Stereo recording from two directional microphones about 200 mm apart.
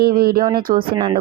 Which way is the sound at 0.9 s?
25° right (ahead or behind).